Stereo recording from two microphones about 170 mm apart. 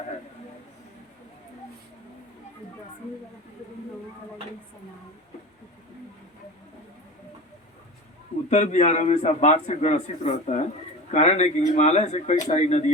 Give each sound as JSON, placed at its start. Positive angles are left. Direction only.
{"t": 8.4, "sound": "a man's voice", "side_deg": 45}